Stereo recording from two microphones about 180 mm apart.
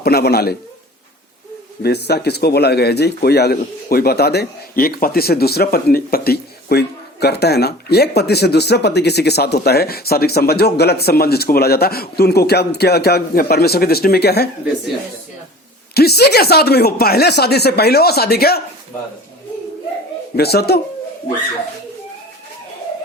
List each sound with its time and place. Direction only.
0.0 s speech: 60° left (ahead or behind)
1.8 s speech: 65° left (ahead or behind)
16.0 s speech: 65° left (ahead or behind)
20.3 s speech: 60° left (ahead or behind)